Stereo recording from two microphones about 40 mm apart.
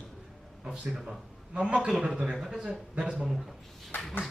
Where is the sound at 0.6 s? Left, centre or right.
Right.